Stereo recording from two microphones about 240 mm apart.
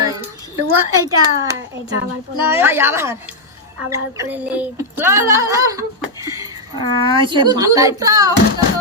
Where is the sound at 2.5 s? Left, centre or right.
Centre.